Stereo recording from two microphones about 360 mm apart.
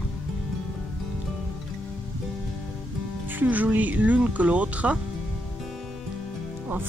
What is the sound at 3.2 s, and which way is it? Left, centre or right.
Speech, centre.